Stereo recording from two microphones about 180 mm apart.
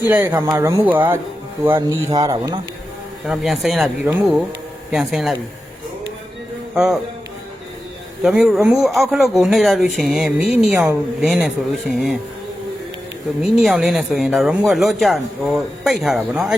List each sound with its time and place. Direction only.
0.1 s speech: 15° right (ahead or behind)
3.2 s speech: centre (ahead or behind)
6.7 s speech: 5° right (ahead or behind)
8.2 s speech: 5° right (ahead or behind)
10.8 s speech: 15° right (ahead or behind)
11.3 s speech: centre (ahead or behind)
13.4 s speech: centre (ahead or behind)